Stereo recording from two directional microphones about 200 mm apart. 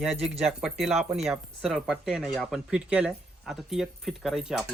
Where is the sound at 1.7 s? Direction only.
5° right (ahead or behind).